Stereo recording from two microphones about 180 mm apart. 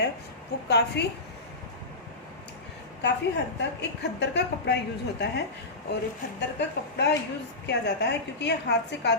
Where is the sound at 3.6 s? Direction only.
70° left (ahead or behind).